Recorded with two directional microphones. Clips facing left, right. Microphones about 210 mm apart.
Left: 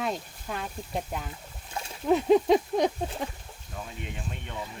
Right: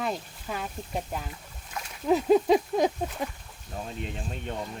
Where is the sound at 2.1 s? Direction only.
Centre (ahead or behind).